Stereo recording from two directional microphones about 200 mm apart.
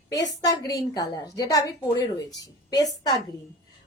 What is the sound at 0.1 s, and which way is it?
A woman's voice, 20° left (ahead or behind).